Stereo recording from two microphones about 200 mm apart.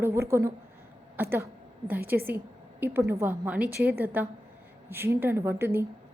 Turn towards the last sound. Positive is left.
turn(degrees=-10)  # may be behind; listen again after turning